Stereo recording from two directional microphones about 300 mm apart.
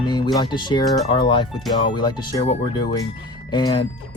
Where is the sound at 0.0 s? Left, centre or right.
Centre.